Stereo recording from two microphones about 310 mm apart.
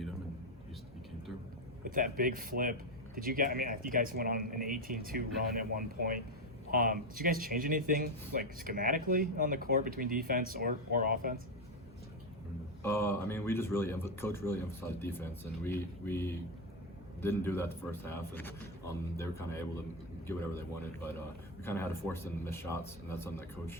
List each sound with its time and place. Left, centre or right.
1.8 s speech: right
12.8 s a man's voice: centre